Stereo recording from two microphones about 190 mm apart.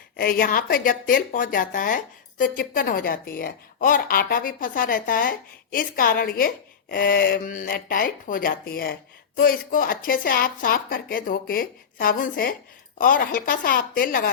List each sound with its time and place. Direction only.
0.2 s speech: 50° left (ahead or behind)